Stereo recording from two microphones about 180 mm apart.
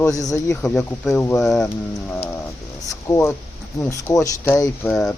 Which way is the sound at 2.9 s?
15° left (ahead or behind).